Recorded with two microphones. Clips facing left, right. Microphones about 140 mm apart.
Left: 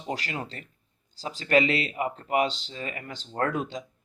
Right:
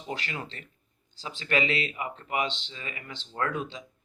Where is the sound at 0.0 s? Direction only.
40° left (ahead or behind).